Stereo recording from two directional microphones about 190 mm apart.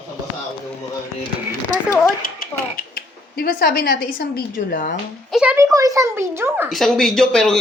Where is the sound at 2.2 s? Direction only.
50° left (ahead or behind).